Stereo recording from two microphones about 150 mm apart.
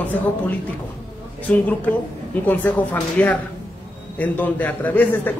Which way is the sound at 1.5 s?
10° left (ahead or behind).